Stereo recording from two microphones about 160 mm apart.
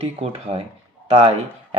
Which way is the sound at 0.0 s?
35° right (ahead or behind).